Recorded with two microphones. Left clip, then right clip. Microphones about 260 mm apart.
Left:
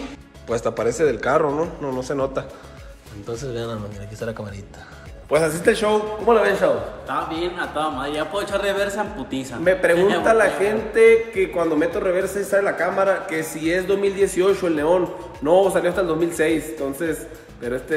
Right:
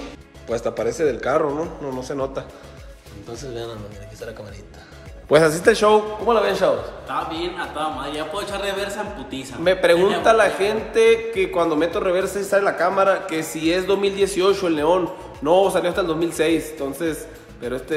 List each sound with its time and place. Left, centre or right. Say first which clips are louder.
0.5 s a man's voice: left 1 dB; centre
3.4 s a man's voice: left 1 dB; centre
5.6 s a man's voice: right 3 dB; right
6.2 s a man's voice: left 1 dB; centre
9.7 s a man's voice: right 1 dB; centre
9.9 s a man's voice: even; centre
10.2 s a man's voice: right 1 dB; centre